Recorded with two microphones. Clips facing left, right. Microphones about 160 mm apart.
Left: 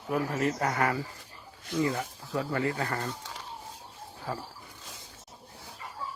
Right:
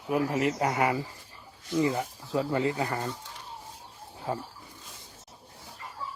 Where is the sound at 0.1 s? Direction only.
15° right (ahead or behind).